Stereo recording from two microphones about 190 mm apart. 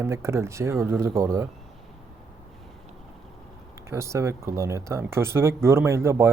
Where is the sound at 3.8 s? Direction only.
15° right (ahead or behind).